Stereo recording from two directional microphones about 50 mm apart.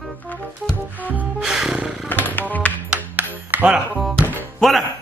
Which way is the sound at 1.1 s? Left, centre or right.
Right.